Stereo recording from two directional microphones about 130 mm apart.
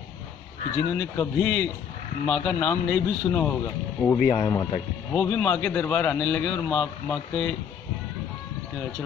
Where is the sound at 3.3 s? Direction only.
15° left (ahead or behind).